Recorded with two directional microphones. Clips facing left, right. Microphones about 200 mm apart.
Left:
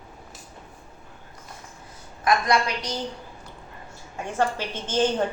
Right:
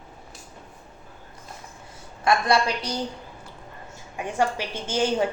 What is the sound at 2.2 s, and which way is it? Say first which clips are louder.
Speech: right 1 dB; 30° right (ahead or behind).